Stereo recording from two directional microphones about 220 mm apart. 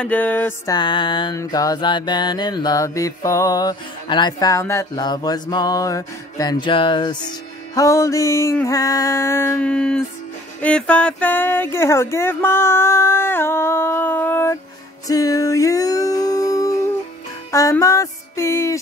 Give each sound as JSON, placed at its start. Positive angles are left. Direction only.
{"t": 0.0, "sound": "music", "side_deg": 5}
{"t": 0.7, "sound": "music", "side_deg": 20}